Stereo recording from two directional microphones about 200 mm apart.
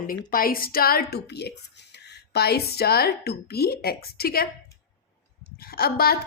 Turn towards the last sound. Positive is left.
turn(degrees=50)  # may be behind; listen again after turning